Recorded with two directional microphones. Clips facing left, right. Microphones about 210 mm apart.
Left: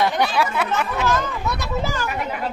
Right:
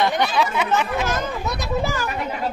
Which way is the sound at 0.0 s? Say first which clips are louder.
Even; 10° left (ahead or behind).